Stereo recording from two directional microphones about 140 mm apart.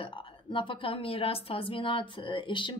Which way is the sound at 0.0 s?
40° left (ahead or behind).